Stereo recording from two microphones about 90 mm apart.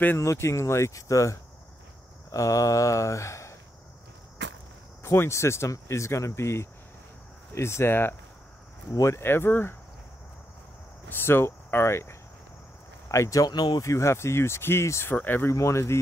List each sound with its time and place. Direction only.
0.2 s speech: 30° left (ahead or behind)
5.0 s speech: 30° left (ahead or behind)
11.1 s speech: 25° left (ahead or behind)
13.5 s speech: 50° left (ahead or behind)
13.8 s speech: 30° left (ahead or behind)
15.5 s speech: 35° left (ahead or behind)